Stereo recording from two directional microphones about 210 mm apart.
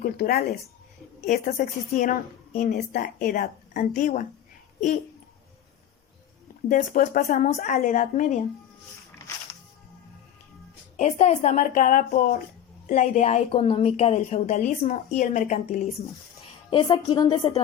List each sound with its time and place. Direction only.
0.0 s a woman's voice: 45° left (ahead or behind)
6.7 s a woman's voice: 40° left (ahead or behind)
10.9 s a woman's voice: 30° left (ahead or behind)